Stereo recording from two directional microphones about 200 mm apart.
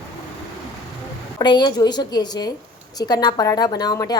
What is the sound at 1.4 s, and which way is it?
A woman's voice, 20° left (ahead or behind).